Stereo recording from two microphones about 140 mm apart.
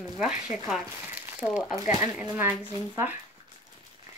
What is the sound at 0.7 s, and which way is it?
Speech, centre (ahead or behind).